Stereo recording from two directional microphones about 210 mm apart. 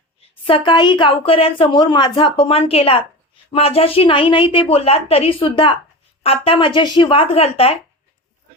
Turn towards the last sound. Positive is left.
turn(degrees=30)  # may be behind; listen again after turning